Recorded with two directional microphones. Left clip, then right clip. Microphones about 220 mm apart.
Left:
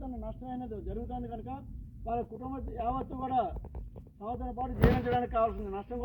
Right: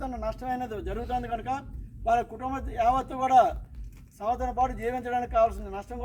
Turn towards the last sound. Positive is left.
turn(degrees=-35)  # may be behind; listen again after turning